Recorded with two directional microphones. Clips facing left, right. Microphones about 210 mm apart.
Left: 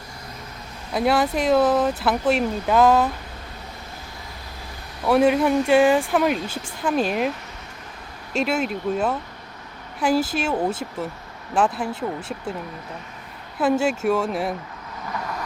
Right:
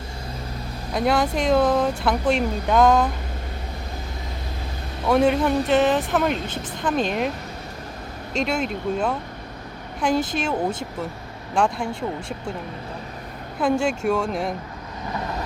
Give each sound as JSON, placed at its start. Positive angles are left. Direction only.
{"t": 0.9, "sound": "speech", "side_deg": 5}
{"t": 5.0, "sound": "speech", "side_deg": 5}
{"t": 13.6, "sound": "speech", "side_deg": 5}
{"t": 15.1, "sound": "vehicle", "side_deg": -25}